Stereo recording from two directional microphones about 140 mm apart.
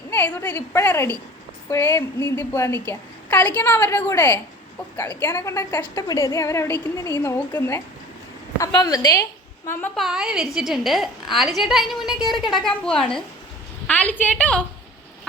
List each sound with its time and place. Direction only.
0.1 s a woman's voice: 15° left (ahead or behind)
9.9 s a woman's voice: centre (ahead or behind)